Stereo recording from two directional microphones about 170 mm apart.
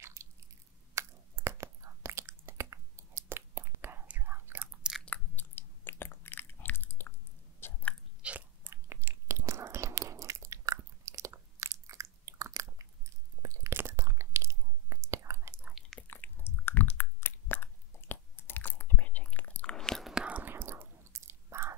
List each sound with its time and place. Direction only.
0.0 s squish: 15° right (ahead or behind)
0.9 s whispering: 15° right (ahead or behind); by 7.2 s 15° left (ahead or behind)
7.6 s chewing: 10° left (ahead or behind)
8.2 s biting: 10° right (ahead or behind)
15.7 s chewing: 5° left (ahead or behind); by 21.7 s 15° right (ahead or behind)